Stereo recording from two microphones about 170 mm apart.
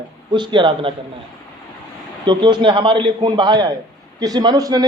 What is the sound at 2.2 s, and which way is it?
A man's voice, 25° right (ahead or behind).